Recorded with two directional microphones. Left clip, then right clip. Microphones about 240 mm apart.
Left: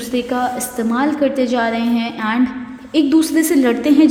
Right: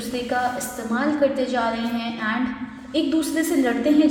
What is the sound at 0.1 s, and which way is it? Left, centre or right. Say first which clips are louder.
A woman's voice: left 5 dB; left.